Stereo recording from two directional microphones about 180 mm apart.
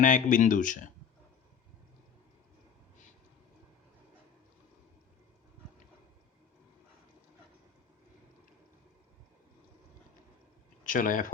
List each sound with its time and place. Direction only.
0.0 s speech: 45° left (ahead or behind)
10.8 s speech: 50° left (ahead or behind)